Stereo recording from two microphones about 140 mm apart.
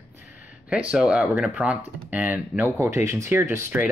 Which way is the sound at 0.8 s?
5° right (ahead or behind).